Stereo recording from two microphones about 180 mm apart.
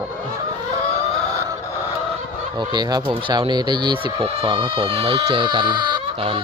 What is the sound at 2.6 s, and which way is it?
Speech, 25° right (ahead or behind).